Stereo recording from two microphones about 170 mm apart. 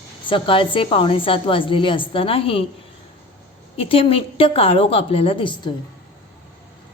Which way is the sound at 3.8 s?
35° left (ahead or behind).